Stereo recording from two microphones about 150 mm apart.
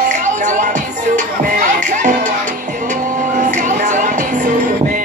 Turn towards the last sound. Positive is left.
turn(degrees=-60)  # may be behind; listen again after turning